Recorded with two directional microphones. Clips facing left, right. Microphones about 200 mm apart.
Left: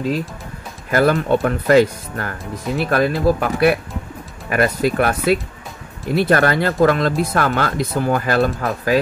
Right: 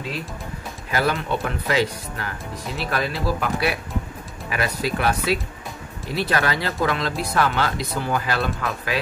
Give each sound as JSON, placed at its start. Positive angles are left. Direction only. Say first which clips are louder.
{"t": 0.9, "sound": "speech", "louder": "left 8 dB", "side_deg": 50}